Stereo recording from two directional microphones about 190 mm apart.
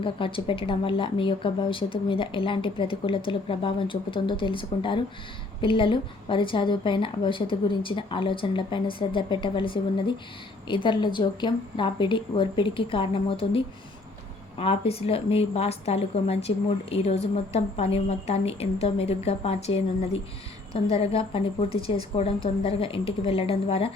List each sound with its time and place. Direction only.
0.0 s speech: 25° left (ahead or behind)
14.6 s a woman's voice: 30° left (ahead or behind)
20.9 s speech: 30° left (ahead or behind)